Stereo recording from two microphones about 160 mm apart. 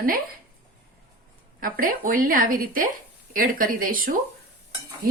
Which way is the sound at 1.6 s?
60° right (ahead or behind).